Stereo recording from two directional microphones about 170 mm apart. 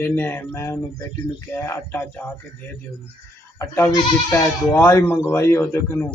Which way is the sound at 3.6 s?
15° left (ahead or behind).